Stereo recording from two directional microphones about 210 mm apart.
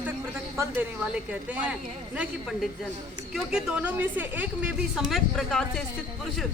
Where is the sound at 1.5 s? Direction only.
5° right (ahead or behind).